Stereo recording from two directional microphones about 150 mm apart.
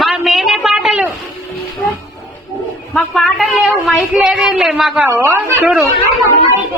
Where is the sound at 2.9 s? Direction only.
5° left (ahead or behind).